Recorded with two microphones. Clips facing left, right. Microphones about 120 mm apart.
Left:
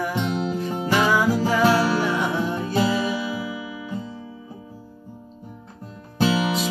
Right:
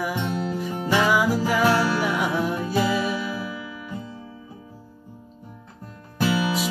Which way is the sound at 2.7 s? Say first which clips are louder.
Left 2 dB; 25° left (ahead or behind).